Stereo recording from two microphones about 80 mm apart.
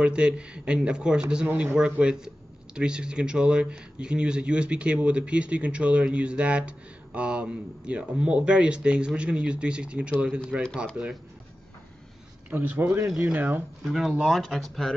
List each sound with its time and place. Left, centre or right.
0.0 s speech: centre
1.5 s a man's voice: right
1.8 s speech: centre
11.0 s a man's voice: right
12.4 s a man's voice: right
13.8 s speech: centre